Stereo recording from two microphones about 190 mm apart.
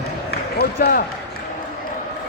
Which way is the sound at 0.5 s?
55° left (ahead or behind).